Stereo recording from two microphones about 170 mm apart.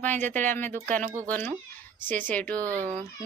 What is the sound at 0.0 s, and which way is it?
Speech, 10° left (ahead or behind).